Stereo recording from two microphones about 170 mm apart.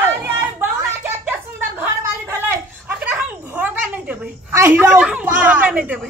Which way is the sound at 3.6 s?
10° right (ahead or behind).